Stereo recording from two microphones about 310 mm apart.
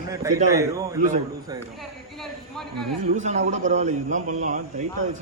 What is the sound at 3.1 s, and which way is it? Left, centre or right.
A man's voice, right.